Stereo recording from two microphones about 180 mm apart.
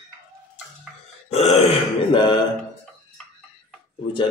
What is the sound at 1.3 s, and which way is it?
Grunt, 35° left (ahead or behind).